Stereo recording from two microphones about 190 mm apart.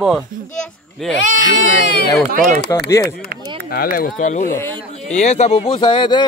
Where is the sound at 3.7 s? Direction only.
50° left (ahead or behind).